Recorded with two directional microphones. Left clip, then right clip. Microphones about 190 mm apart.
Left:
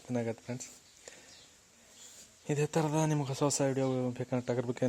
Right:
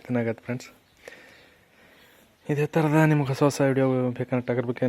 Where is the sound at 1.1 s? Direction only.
Centre (ahead or behind).